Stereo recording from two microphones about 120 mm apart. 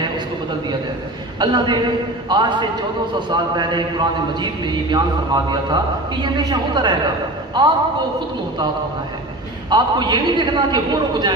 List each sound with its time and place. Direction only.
1.4 s a man's voice: 35° right (ahead or behind)
9.7 s a man's voice: 35° right (ahead or behind)